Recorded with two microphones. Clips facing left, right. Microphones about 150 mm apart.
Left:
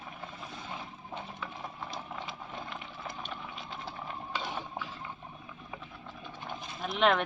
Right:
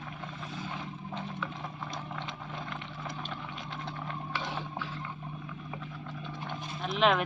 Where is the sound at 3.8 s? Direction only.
15° left (ahead or behind).